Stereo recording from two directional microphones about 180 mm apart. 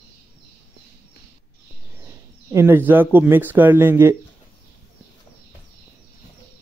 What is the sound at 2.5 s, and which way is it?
Speech, 10° right (ahead or behind).